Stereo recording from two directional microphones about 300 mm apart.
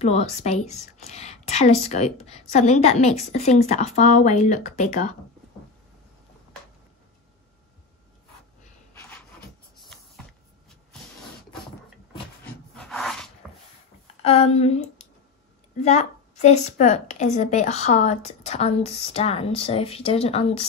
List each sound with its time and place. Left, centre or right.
0.0 s a woman's voice: left
12.7 s a sound: centre
14.2 s a woman's voice: centre